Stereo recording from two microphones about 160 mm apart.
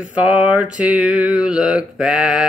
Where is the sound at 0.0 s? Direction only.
10° right (ahead or behind).